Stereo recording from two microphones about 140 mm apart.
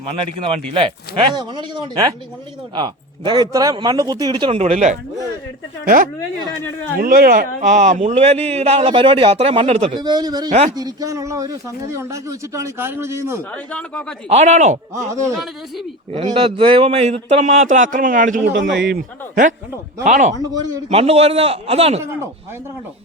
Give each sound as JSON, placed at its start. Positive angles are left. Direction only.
{"t": 0.2, "sound": "speech", "side_deg": -40}
{"t": 4.6, "sound": "a man's voice", "side_deg": -60}
{"t": 5.8, "sound": "speech", "side_deg": -80}
{"t": 7.0, "sound": "a man's voice", "side_deg": -90}
{"t": 9.9, "sound": "speech", "side_deg": -30}
{"t": 13.7, "sound": "speech", "side_deg": 10}
{"t": 14.3, "sound": "a man's voice", "side_deg": -55}
{"t": 16.1, "sound": "a man's voice", "side_deg": -40}
{"t": 20.1, "sound": "a man's voice", "side_deg": -60}
{"t": 20.3, "sound": "speech", "side_deg": -25}
{"t": 20.9, "sound": "a man's voice", "side_deg": -45}